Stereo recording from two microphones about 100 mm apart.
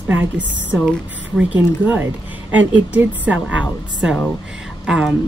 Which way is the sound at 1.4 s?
15° right (ahead or behind).